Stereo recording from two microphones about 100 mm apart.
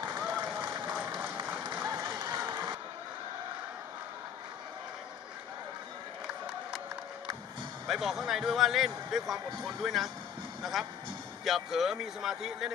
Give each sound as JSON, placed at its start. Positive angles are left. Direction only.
{"t": 0.2, "sound": "run", "side_deg": -15}
{"t": 0.7, "sound": "applause", "side_deg": -15}
{"t": 1.9, "sound": "applause", "side_deg": -30}
{"t": 2.1, "sound": "applause", "side_deg": -45}
{"t": 6.2, "sound": "a sound", "side_deg": -10}
{"t": 7.8, "sound": "a man's voice", "side_deg": -5}